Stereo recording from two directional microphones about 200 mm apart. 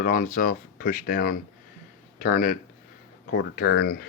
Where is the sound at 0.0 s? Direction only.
40° left (ahead or behind).